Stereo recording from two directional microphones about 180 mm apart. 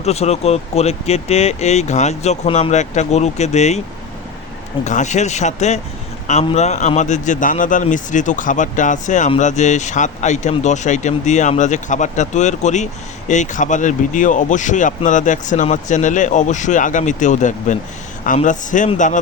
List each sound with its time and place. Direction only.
0.0 s speech: 35° left (ahead or behind)
4.8 s speech: 40° left (ahead or behind)